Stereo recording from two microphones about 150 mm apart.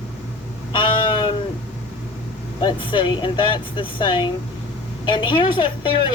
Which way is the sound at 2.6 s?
35° left (ahead or behind).